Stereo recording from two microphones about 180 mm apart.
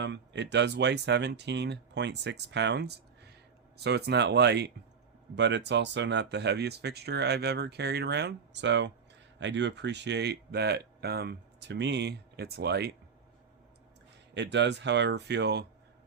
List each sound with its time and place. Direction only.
0.0 s speech: 75° right (ahead or behind)
14.3 s speech: 75° right (ahead or behind)